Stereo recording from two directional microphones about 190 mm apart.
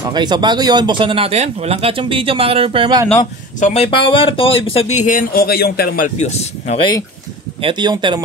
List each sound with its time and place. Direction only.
0.1 s speech: 20° right (ahead or behind)
3.2 s speech: 40° left (ahead or behind)
7.6 s speech: 25° right (ahead or behind)